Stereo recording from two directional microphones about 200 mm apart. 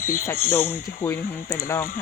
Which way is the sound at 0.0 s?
15° left (ahead or behind).